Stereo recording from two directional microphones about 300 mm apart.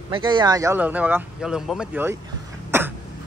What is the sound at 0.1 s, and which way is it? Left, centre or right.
Speech, centre.